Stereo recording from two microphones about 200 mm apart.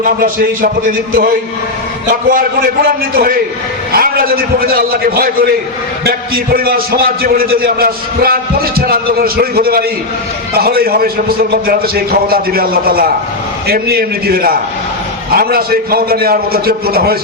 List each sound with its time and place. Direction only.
0.0 s a man's voice: 45° right (ahead or behind)
2.8 s a man's voice: 45° right (ahead or behind)